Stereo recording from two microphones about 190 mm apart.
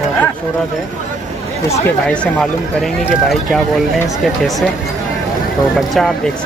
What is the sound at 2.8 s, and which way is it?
Speech, centre (ahead or behind).